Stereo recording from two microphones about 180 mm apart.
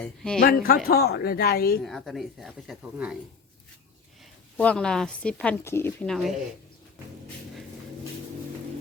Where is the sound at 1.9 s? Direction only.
Centre (ahead or behind).